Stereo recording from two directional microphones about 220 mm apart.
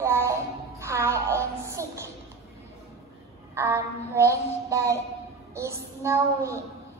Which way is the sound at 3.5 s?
10° right (ahead or behind).